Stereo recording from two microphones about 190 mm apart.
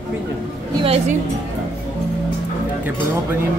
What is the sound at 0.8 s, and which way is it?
Speech, 35° right (ahead or behind).